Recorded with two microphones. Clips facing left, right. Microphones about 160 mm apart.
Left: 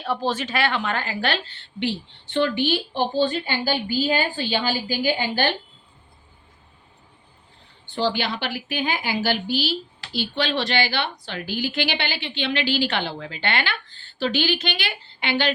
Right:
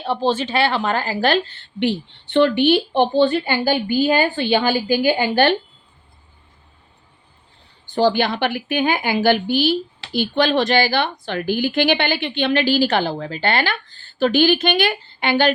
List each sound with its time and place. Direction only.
0.0 s speech: 30° right (ahead or behind)
1.8 s speech: 60° right (ahead or behind)
7.9 s a woman's voice: 45° right (ahead or behind)